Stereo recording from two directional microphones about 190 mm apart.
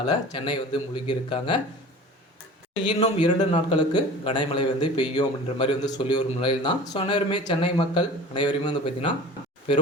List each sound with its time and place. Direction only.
0.0 s a man's voice: 25° left (ahead or behind)
2.9 s a man's voice: 30° left (ahead or behind)